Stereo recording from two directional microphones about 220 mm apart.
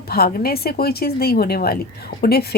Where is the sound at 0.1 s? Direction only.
40° left (ahead or behind).